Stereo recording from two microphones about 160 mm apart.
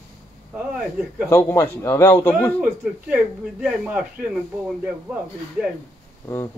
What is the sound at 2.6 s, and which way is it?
Speech, 10° right (ahead or behind).